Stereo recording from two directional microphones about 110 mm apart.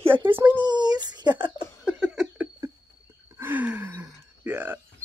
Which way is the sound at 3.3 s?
20° right (ahead or behind).